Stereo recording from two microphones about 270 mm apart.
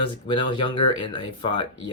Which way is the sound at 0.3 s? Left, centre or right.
Centre.